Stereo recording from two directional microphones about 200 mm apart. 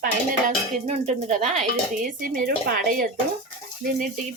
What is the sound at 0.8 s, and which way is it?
A woman's voice, 35° right (ahead or behind).